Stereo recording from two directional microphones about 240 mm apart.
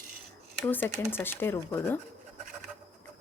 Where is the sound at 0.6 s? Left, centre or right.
Centre.